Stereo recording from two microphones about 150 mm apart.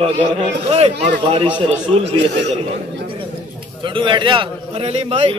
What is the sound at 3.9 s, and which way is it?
A man's voice, 35° right (ahead or behind).